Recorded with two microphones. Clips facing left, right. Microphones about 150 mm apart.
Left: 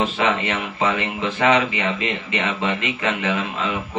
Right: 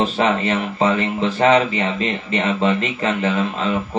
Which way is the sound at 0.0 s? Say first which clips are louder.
Right 3 dB; 40° right (ahead or behind).